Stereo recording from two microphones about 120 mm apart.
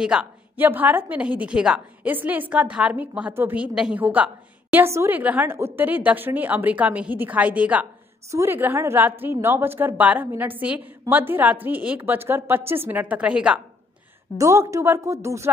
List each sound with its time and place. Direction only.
0.0 s a woman's voice: 5° right (ahead or behind)
14.4 s a woman's voice: 25° right (ahead or behind)